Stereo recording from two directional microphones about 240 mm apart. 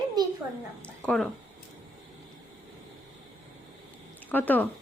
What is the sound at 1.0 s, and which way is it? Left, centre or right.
Speech, centre.